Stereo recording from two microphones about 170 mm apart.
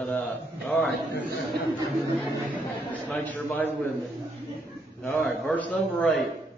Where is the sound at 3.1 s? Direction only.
10° left (ahead or behind).